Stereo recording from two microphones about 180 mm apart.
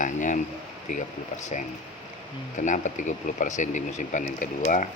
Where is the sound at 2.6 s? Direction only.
45° left (ahead or behind).